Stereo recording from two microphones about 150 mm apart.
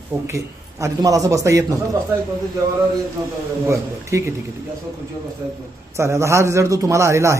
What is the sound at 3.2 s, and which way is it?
Speech, 25° right (ahead or behind).